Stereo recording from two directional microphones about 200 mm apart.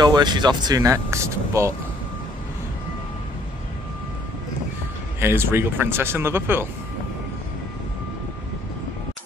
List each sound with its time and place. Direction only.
0.0 s speech: 20° right (ahead or behind)
5.2 s speech: 10° right (ahead or behind)